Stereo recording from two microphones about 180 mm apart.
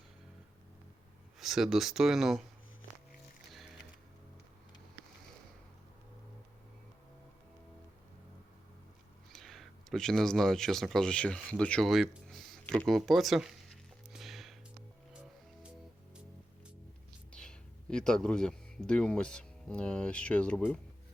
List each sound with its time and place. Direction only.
1.4 s speech: centre (ahead or behind)
9.3 s speech: centre (ahead or behind)
14.1 s music: centre (ahead or behind)
17.3 s speech: 5° left (ahead or behind)